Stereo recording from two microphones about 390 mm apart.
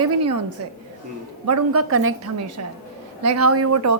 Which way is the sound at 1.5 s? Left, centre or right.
Right.